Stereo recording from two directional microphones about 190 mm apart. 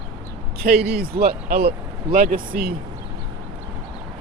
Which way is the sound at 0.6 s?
50° right (ahead or behind).